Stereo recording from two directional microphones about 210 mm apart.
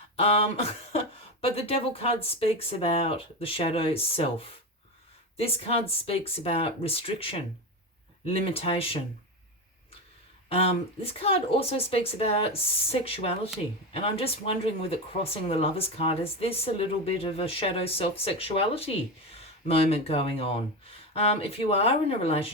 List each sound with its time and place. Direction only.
0.2 s speech: 30° left (ahead or behind)
10.5 s speech: 30° left (ahead or behind)